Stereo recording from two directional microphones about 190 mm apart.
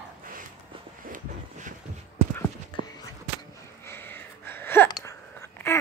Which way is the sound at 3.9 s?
10° left (ahead or behind).